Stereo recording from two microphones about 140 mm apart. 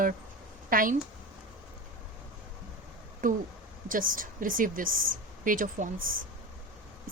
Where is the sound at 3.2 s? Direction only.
70° right (ahead or behind).